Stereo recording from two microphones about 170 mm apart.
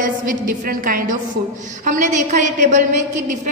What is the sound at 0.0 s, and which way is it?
A woman's voice, 50° right (ahead or behind).